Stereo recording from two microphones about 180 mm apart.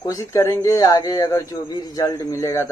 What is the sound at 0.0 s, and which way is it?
Speech, 20° left (ahead or behind).